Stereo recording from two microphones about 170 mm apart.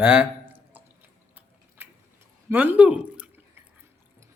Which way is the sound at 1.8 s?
15° right (ahead or behind).